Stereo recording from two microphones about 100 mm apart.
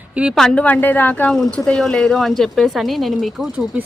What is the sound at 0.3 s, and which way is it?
A woman's voice, 10° left (ahead or behind).